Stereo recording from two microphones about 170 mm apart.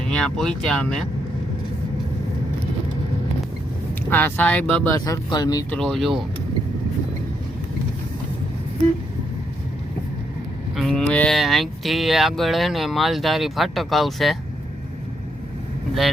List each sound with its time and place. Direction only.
0.1 s speech: 5° left (ahead or behind)
4.1 s speech: 10° left (ahead or behind)
4.9 s speech: 20° left (ahead or behind)
5.7 s speech: centre (ahead or behind)
10.8 s speech: 5° left (ahead or behind)